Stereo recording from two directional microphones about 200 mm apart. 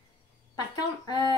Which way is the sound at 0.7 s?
20° left (ahead or behind).